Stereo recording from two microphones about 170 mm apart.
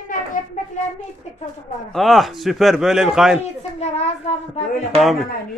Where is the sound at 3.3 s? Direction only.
40° left (ahead or behind).